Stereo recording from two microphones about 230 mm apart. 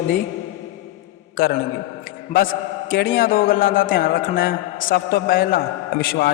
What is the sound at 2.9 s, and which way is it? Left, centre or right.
A man's voice, left.